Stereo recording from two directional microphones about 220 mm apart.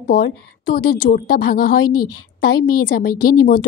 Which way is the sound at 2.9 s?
40° left (ahead or behind).